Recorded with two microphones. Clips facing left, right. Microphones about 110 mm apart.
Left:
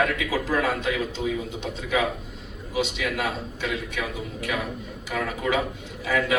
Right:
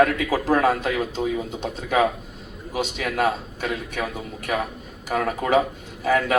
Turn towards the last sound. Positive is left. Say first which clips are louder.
# right 3 dB
turn(degrees=-45)  # may be behind; listen again after turning